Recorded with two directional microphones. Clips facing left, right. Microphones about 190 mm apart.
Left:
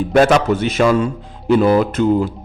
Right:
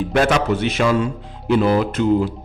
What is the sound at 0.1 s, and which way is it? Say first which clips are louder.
A man's voice: left 5 dB; 45° left (ahead or behind).